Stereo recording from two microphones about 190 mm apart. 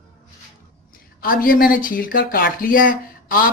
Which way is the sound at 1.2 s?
50° left (ahead or behind).